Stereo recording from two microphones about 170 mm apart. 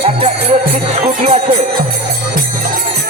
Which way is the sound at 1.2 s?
35° right (ahead or behind).